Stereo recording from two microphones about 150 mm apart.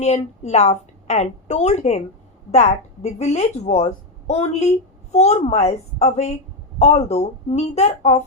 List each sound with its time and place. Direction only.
0.0 s a woman's voice: 45° left (ahead or behind)